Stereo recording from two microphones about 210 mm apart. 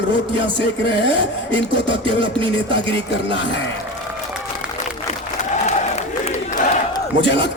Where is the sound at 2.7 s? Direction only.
55° left (ahead or behind).